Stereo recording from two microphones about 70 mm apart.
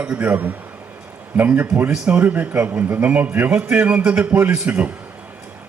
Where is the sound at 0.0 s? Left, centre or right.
Centre.